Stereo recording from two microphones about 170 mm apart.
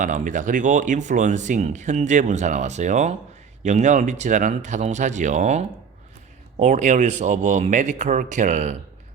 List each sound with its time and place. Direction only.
0.0 s speech: 50° right (ahead or behind)